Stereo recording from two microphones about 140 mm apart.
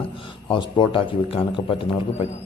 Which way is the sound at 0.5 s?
35° left (ahead or behind).